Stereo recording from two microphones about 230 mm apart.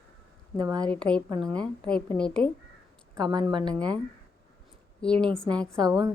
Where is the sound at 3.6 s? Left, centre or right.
Centre.